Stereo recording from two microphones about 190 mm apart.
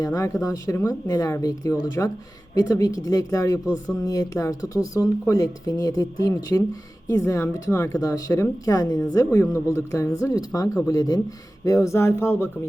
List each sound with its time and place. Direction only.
0.0 s speech: 15° left (ahead or behind)